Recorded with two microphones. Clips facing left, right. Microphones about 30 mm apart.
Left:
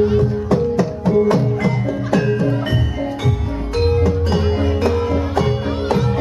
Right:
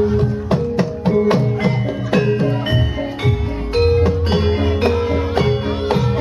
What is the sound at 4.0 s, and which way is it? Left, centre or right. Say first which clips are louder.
Music: right 1 dB; right.